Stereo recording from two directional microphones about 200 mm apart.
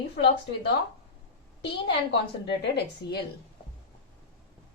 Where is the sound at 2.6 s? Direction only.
55° left (ahead or behind).